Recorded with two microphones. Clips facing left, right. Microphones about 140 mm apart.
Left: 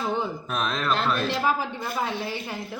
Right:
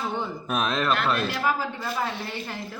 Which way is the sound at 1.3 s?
20° left (ahead or behind).